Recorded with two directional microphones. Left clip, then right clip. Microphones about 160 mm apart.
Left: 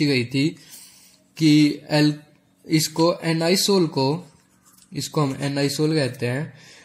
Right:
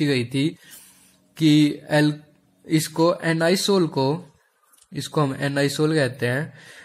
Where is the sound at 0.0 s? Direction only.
20° left (ahead or behind).